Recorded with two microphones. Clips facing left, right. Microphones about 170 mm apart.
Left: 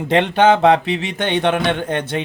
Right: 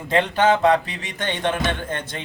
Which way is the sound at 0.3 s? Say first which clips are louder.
Left 4 dB; 70° left (ahead or behind).